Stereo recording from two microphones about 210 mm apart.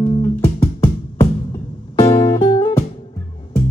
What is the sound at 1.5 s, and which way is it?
Music, 25° left (ahead or behind).